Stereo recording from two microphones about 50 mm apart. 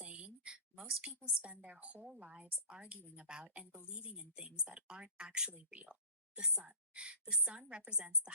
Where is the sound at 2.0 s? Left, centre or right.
Centre.